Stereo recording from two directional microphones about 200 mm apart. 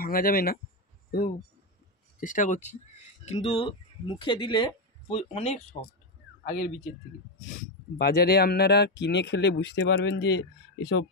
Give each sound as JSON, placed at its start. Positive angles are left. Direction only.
{"t": 0.0, "sound": "speech", "side_deg": 45}
{"t": 2.1, "sound": "speech", "side_deg": 40}
{"t": 8.0, "sound": "speech", "side_deg": 50}